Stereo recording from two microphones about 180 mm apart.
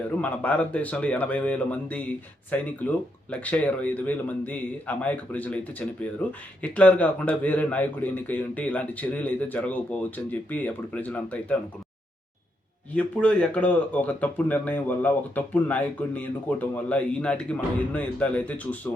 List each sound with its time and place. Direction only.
0.2 s speech: 10° left (ahead or behind)
12.9 s speech: 10° left (ahead or behind)